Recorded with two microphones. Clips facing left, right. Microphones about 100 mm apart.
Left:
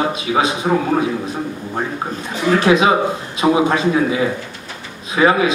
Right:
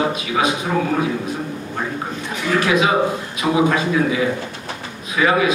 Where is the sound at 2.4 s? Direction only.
25° left (ahead or behind).